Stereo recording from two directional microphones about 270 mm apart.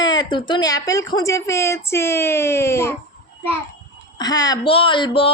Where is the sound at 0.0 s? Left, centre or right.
Centre.